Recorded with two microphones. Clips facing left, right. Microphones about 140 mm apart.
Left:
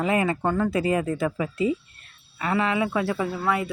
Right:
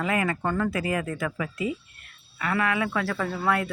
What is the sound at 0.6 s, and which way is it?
Speech, 25° left (ahead or behind).